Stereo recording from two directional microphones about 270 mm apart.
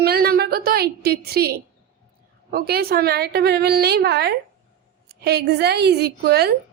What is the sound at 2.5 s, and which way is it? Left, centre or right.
A woman's voice, right.